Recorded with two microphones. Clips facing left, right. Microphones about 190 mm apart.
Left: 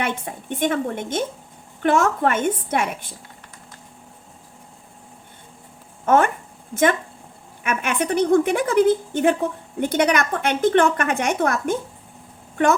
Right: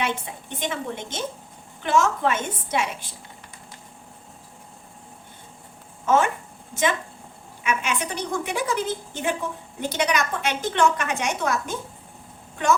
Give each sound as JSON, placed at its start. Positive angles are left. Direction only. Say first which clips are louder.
{"t": 0.0, "sound": "a woman's voice", "louder": "left 2 dB", "side_deg": 55}
{"t": 6.1, "sound": "a woman's voice", "louder": "left 3 dB", "side_deg": 55}
{"t": 7.6, "sound": "a woman's voice", "louder": "left 3 dB", "side_deg": 55}